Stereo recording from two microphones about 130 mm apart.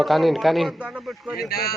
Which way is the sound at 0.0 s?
Centre (ahead or behind).